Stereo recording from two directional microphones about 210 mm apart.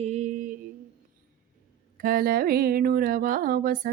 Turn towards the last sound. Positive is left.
turn(degrees=-45)  # may be behind; listen again after turning